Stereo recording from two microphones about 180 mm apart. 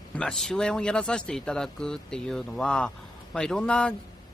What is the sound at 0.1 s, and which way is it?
Speech, 5° left (ahead or behind).